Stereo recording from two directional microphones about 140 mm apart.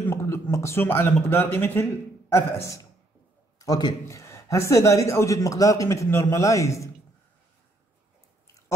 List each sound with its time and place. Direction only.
0.0 s a man's voice: 20° left (ahead or behind)